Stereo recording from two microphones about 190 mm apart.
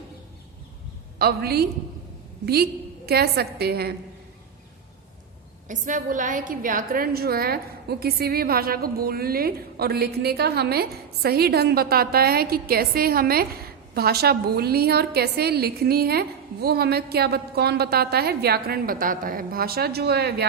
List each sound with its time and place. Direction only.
1.2 s a woman's voice: 55° right (ahead or behind)
3.1 s a woman's voice: 55° right (ahead or behind)
5.6 s a woman's voice: 40° right (ahead or behind)